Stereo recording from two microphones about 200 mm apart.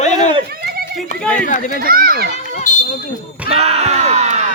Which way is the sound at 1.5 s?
40° left (ahead or behind).